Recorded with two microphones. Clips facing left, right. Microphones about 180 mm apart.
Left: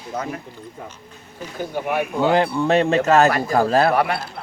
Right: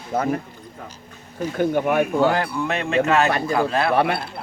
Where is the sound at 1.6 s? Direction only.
50° right (ahead or behind).